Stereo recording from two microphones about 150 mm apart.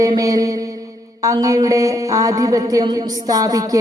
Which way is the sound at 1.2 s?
20° right (ahead or behind).